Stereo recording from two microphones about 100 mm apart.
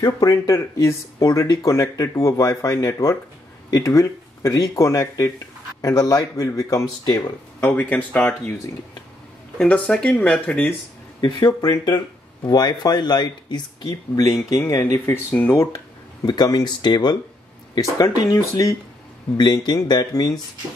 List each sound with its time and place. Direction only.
0.0 s speech: 35° left (ahead or behind)
7.6 s speech: 20° left (ahead or behind)
9.6 s speech: 15° left (ahead or behind)
11.1 s speech: 45° left (ahead or behind)
14.2 s speech: 30° left (ahead or behind)
16.3 s speech: 40° left (ahead or behind)
17.7 s speech: 35° left (ahead or behind)
19.3 s speech: 45° left (ahead or behind)